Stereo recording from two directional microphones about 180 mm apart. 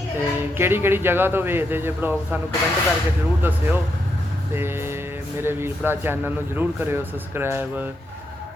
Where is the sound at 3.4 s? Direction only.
10° right (ahead or behind).